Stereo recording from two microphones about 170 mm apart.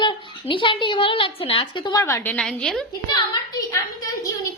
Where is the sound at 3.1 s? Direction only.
25° left (ahead or behind).